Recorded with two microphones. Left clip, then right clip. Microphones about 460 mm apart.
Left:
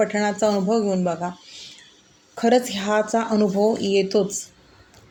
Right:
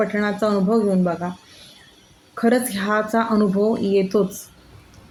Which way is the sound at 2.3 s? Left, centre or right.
Right.